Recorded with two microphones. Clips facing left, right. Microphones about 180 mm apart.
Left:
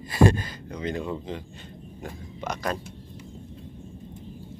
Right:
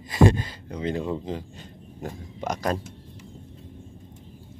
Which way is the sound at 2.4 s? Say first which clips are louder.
Right 3 dB; 40° right (ahead or behind).